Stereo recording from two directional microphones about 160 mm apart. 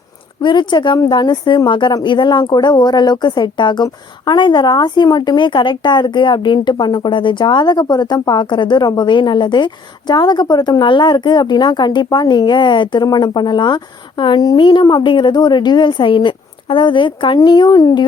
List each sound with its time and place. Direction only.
0.4 s a woman's voice: 30° left (ahead or behind)